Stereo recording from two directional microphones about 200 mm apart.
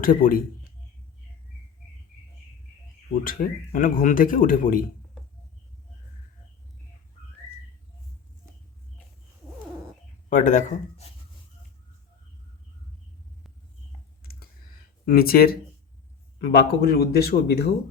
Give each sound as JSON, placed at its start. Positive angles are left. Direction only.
{"t": 0.0, "sound": "speech", "side_deg": 45}
{"t": 3.2, "sound": "speech", "side_deg": 40}
{"t": 10.2, "sound": "speech", "side_deg": 40}
{"t": 14.2, "sound": "typing", "side_deg": 50}
{"t": 15.0, "sound": "speech", "side_deg": 50}